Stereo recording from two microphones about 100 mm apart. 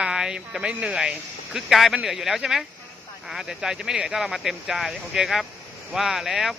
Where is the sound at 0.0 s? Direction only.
5° right (ahead or behind).